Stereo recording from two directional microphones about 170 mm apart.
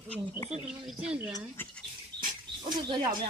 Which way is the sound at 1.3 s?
20° left (ahead or behind).